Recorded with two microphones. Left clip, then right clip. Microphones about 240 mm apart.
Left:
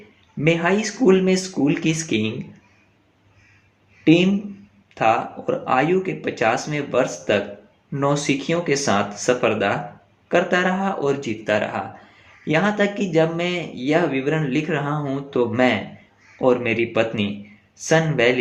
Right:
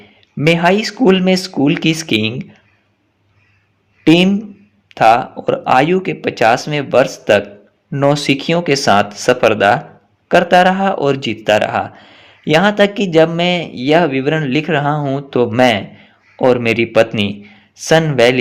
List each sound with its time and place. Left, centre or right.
0.4 s speech: right
4.0 s speech: right